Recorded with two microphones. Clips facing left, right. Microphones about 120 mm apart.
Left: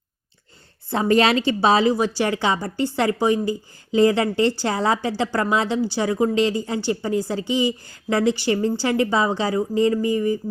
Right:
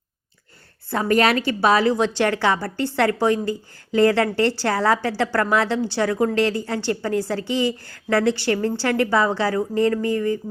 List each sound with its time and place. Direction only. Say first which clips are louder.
0.9 s a woman's voice: left 1 dB; 25° left (ahead or behind)
2.1 s a woman's voice: right 1 dB; 10° left (ahead or behind)